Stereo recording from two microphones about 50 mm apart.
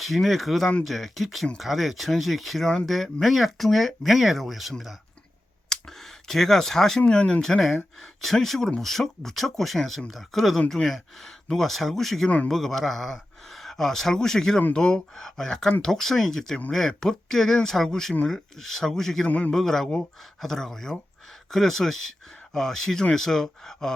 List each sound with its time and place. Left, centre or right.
0.0 s speech: centre
5.6 s a sound: centre
7.1 s speech: centre
7.4 s speech: centre
19.3 s a man's voice: left
19.5 s speech: centre